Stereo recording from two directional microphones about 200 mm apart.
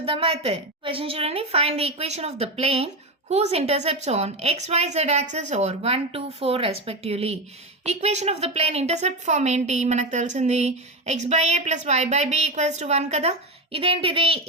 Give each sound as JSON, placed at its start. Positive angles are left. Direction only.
{"t": 0.0, "sound": "a woman's voice", "side_deg": -30}